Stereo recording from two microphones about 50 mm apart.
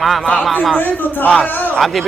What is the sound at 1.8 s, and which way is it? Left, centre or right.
Speech, centre.